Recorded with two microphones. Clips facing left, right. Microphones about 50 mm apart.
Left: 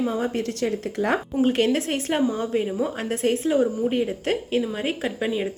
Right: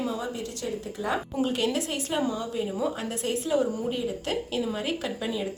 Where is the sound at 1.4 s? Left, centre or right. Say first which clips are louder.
Left 7 dB; left.